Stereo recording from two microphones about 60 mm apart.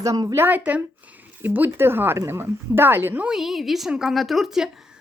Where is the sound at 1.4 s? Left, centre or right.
Right.